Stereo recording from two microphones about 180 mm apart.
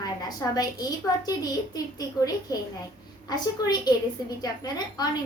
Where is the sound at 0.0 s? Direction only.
20° left (ahead or behind).